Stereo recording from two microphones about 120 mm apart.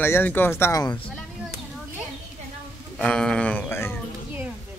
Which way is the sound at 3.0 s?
5° left (ahead or behind).